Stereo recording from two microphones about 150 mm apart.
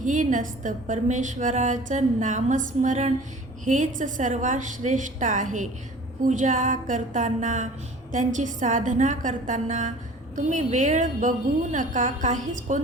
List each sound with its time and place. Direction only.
0.0 s a woman's voice: 55° right (ahead or behind)